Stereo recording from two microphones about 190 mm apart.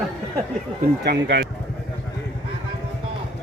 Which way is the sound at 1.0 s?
65° right (ahead or behind).